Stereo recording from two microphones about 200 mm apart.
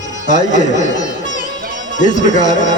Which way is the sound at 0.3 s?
40° left (ahead or behind).